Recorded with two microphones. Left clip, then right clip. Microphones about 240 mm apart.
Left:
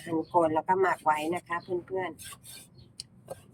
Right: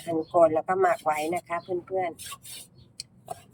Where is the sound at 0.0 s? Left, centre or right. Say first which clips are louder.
Right 5 dB; centre.